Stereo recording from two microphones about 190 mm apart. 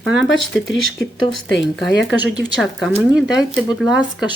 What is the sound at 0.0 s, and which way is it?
Speech, centre (ahead or behind).